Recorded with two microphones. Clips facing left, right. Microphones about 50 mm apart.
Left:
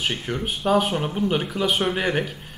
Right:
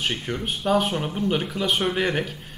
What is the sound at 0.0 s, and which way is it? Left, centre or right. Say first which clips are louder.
Speech: left 1 dB; centre.